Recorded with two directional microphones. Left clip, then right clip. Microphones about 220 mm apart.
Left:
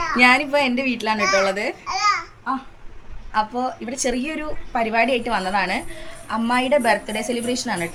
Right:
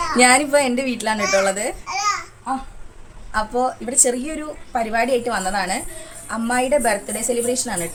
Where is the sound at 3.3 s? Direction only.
15° right (ahead or behind).